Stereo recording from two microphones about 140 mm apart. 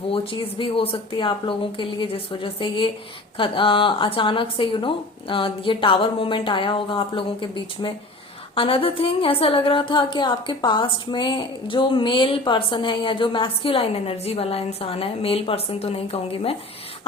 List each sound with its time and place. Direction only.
0.1 s a woman's voice: 40° left (ahead or behind)